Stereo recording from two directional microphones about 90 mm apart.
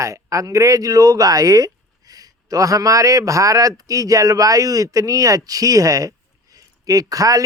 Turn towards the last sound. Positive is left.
turn(degrees=-40)  # may be behind; listen again after turning